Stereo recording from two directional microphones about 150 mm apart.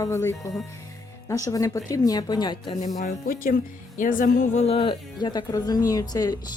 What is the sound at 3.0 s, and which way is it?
Speech, 65° left (ahead or behind).